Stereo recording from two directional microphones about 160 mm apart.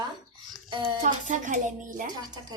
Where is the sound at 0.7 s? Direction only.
30° right (ahead or behind).